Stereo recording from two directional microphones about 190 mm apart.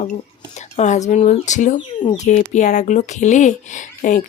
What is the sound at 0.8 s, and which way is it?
Speech, 35° left (ahead or behind).